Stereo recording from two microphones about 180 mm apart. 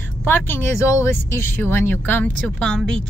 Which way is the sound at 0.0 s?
10° left (ahead or behind).